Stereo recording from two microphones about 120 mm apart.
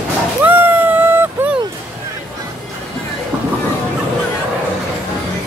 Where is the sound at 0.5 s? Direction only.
15° right (ahead or behind).